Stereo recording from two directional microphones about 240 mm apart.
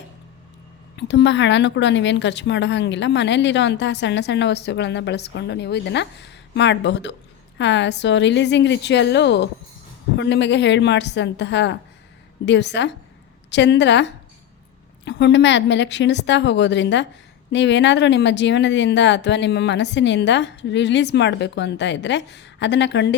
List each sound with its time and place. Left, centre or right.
0.9 s a woman's voice: left